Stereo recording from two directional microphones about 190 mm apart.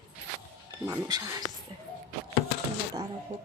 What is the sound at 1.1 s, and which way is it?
Speech, 20° right (ahead or behind).